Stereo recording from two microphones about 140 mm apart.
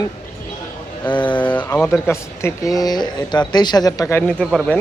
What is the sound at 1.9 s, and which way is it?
Speech, 20° left (ahead or behind).